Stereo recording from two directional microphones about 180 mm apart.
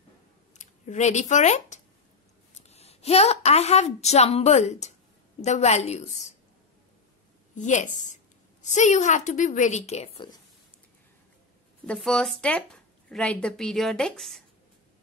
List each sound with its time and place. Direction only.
0.6 s a woman's voice: 40° left (ahead or behind)
7.5 s a woman's voice: 45° left (ahead or behind)
11.8 s speech: 5° left (ahead or behind)